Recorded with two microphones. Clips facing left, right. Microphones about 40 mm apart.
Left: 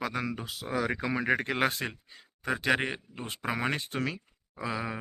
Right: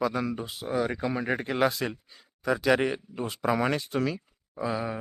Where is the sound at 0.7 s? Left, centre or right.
Left.